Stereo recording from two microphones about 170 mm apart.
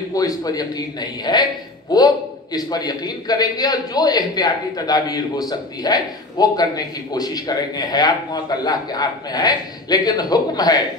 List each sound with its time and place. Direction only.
0.1 s a man's voice: 20° left (ahead or behind)